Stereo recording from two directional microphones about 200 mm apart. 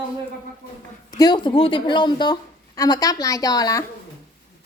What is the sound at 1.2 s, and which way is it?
A woman's voice, 20° left (ahead or behind).